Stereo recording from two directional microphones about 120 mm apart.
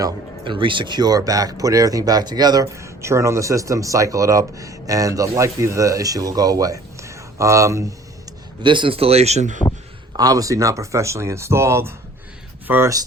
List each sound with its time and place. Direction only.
0.4 s speech: 45° right (ahead or behind); by 7.9 s 25° right (ahead or behind)
8.6 s speech: 45° right (ahead or behind); by 9.6 s 75° right (ahead or behind)
10.1 s speech: 35° right (ahead or behind); by 12.9 s 15° right (ahead or behind)